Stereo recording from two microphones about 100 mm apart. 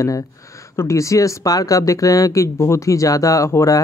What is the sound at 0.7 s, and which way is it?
Speech, 30° left (ahead or behind).